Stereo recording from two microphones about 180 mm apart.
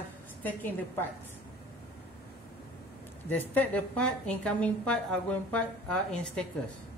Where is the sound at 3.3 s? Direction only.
10° left (ahead or behind).